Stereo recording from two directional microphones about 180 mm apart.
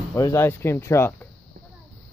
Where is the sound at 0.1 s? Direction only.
15° left (ahead or behind).